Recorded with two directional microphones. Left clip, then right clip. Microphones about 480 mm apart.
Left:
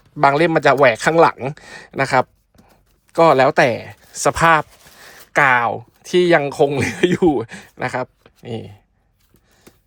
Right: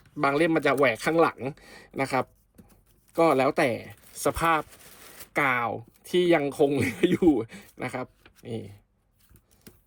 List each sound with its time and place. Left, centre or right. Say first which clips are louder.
0.2 s speech: left 9 dB; centre